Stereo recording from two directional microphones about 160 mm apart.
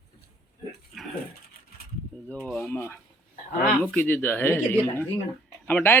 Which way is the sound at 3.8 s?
10° left (ahead or behind).